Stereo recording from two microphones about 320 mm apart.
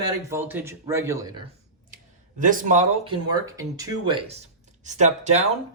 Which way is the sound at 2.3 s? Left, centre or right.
Right.